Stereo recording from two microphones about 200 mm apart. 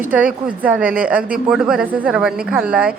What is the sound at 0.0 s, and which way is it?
Speech, 5° right (ahead or behind).